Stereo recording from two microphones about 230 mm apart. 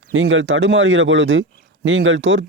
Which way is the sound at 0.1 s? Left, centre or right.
Right.